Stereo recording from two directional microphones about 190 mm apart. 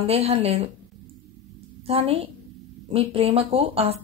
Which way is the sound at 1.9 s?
30° right (ahead or behind).